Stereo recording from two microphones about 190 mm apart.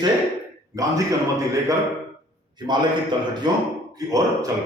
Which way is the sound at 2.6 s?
25° right (ahead or behind).